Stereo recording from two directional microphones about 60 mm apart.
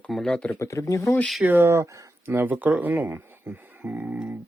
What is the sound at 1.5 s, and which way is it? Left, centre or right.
Speech, right.